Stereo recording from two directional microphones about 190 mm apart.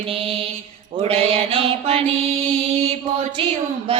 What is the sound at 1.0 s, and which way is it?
Mantra, 30° right (ahead or behind).